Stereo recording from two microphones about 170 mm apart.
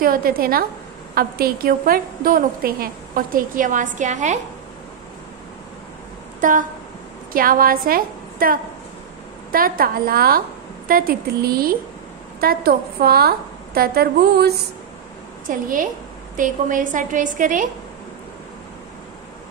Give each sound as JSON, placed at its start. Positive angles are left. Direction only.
{"t": 0.0, "sound": "a woman's voice", "side_deg": -60}
{"t": 6.4, "sound": "a woman's voice", "side_deg": -50}
{"t": 15.4, "sound": "a woman's voice", "side_deg": -50}